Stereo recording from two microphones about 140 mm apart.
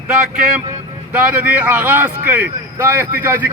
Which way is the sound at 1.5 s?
10° right (ahead or behind).